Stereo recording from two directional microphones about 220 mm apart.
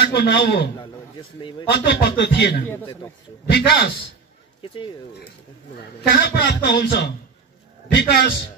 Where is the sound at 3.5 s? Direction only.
50° left (ahead or behind).